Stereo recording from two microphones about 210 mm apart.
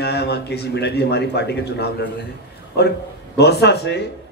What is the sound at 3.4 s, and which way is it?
Speech, 55° left (ahead or behind).